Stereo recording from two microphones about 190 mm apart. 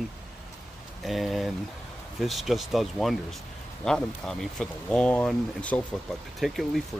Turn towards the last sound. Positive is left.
turn(degrees=0)  # may be behind; listen again after turning